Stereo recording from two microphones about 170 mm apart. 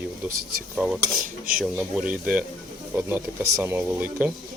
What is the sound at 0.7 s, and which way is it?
Cutlery, centre (ahead or behind).